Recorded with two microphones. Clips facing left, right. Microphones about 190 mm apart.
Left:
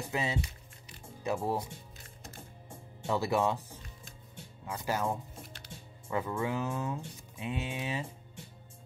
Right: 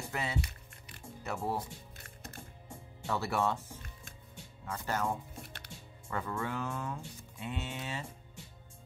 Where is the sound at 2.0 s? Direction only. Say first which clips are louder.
Right 1 dB; 60° right (ahead or behind).